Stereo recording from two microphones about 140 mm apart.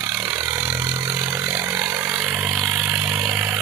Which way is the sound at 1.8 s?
5° right (ahead or behind).